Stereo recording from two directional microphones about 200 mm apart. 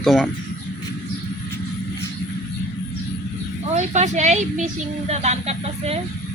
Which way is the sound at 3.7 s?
35° right (ahead or behind).